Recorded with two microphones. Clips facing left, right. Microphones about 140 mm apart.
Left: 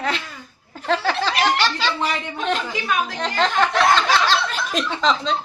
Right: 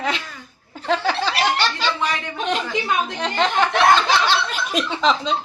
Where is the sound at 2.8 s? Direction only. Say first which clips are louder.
Right 1 dB; 25° right (ahead or behind).